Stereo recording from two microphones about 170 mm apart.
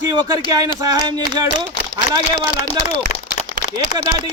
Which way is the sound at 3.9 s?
40° left (ahead or behind).